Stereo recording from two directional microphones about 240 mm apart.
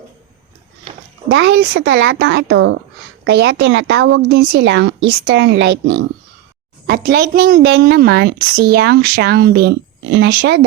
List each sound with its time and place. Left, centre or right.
1.3 s a woman's voice: right